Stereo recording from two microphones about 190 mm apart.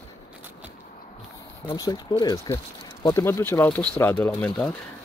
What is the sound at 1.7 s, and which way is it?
Speech, 20° left (ahead or behind).